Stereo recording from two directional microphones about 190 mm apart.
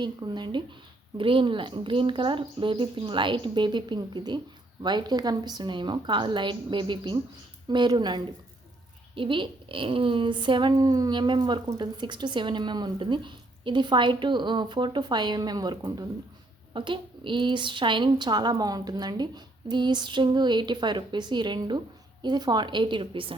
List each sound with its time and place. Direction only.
0.0 s speech: 25° right (ahead or behind)